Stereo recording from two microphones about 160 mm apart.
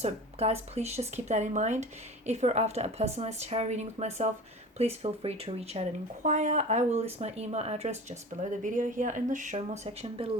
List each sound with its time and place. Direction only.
0.0 s speech: 40° right (ahead or behind)